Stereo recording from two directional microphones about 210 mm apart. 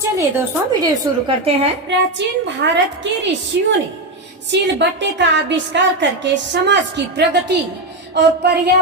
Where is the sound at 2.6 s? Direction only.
55° right (ahead or behind).